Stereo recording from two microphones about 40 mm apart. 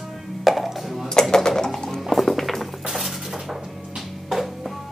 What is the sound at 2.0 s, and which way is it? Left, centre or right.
Music, centre.